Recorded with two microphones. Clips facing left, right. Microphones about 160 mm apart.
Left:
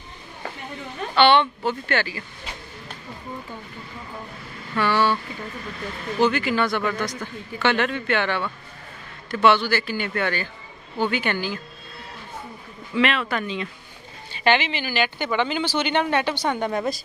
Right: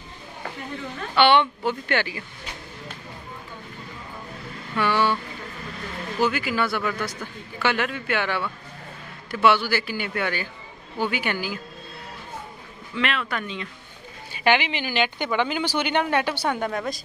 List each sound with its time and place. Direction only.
1.1 s speech: 15° right (ahead or behind)
4.7 s speech: 15° right (ahead or behind)
6.2 s speech: 5° right (ahead or behind)
12.9 s a man's voice: 5° left (ahead or behind)
14.3 s speech: 15° right (ahead or behind)